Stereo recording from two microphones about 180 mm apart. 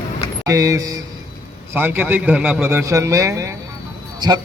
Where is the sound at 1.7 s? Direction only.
10° right (ahead or behind).